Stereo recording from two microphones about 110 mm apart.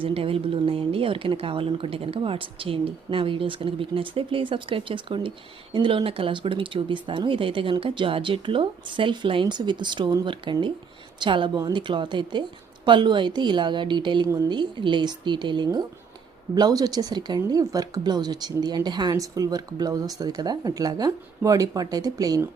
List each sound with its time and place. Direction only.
0.0 s speech: 55° right (ahead or behind); by 22.4 s 35° right (ahead or behind)